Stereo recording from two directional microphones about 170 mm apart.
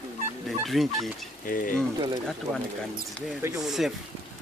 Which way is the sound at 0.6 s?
Centre (ahead or behind).